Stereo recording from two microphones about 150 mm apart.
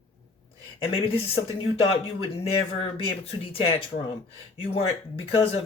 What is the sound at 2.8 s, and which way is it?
Speech, 40° left (ahead or behind).